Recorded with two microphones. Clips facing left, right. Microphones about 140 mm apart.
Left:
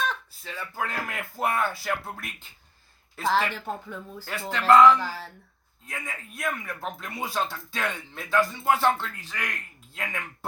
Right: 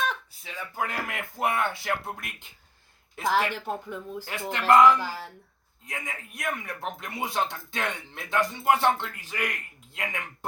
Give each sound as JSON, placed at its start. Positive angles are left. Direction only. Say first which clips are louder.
{"t": 0.1, "sound": "speech", "louder": "left 1 dB", "side_deg": -15}